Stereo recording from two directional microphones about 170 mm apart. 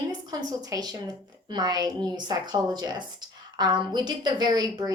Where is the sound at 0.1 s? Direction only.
20° right (ahead or behind).